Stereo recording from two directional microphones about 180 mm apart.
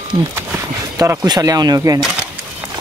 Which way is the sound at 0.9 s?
20° right (ahead or behind).